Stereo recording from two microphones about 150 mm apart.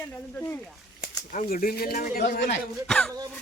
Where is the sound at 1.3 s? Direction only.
70° left (ahead or behind).